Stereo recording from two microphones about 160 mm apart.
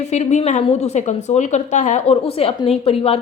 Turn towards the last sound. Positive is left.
turn(degrees=40)  # may be behind; listen again after turning